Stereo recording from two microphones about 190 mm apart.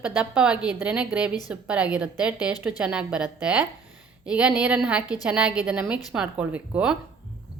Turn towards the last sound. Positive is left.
turn(degrees=-5)  # may be behind; listen again after turning